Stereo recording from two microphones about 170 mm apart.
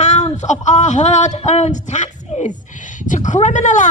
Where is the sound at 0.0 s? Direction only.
40° left (ahead or behind).